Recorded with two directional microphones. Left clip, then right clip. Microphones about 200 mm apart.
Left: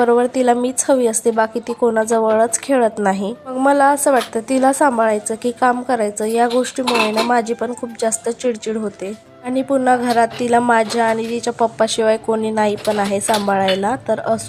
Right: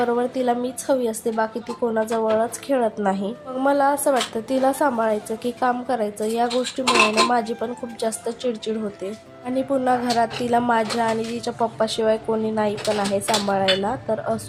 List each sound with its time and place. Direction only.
0.0 s a woman's voice: 30° left (ahead or behind)